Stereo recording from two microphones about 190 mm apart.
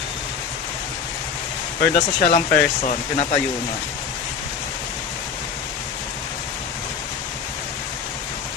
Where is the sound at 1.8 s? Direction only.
45° left (ahead or behind).